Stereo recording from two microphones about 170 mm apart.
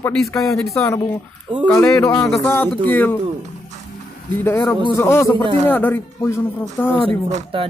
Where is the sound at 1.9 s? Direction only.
20° left (ahead or behind).